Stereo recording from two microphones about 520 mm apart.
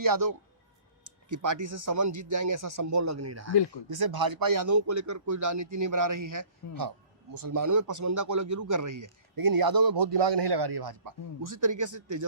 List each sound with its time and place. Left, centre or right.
0.0 s a man's voice: right
3.8 s a man's voice: right